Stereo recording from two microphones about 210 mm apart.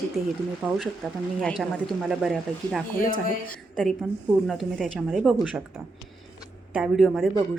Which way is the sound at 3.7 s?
Centre (ahead or behind).